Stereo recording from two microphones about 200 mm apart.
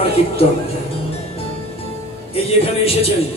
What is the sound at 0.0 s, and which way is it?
Speech, 30° left (ahead or behind).